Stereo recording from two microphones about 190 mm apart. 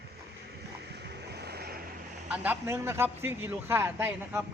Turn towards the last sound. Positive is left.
turn(degrees=-10)  # may be behind; listen again after turning